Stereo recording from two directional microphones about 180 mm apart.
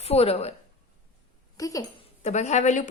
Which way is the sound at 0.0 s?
35° left (ahead or behind).